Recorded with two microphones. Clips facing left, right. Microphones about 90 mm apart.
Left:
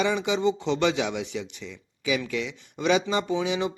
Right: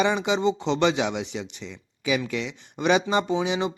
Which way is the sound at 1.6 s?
50° right (ahead or behind).